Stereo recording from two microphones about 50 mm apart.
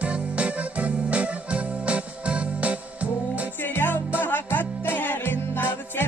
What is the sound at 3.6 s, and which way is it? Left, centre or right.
Music, left.